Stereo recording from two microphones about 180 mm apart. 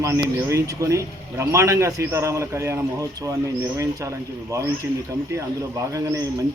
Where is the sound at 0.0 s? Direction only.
15° right (ahead or behind).